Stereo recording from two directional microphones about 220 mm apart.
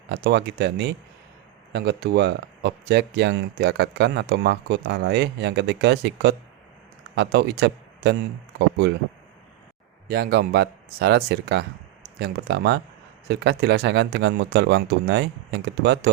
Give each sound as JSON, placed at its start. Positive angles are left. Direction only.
{"t": 0.1, "sound": "speech", "side_deg": -50}
{"t": 10.1, "sound": "speech", "side_deg": -45}